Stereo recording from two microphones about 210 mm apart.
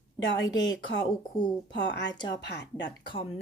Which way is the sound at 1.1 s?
20° left (ahead or behind).